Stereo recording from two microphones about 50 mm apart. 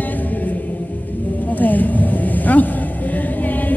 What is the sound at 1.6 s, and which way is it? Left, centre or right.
Vehicle, left.